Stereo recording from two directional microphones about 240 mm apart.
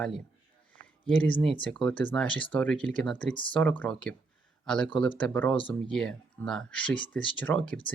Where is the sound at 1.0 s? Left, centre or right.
Centre.